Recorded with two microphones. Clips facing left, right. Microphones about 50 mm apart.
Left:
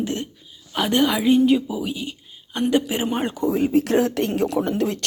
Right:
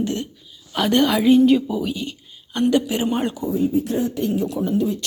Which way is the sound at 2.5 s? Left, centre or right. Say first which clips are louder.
Right 2 dB; left.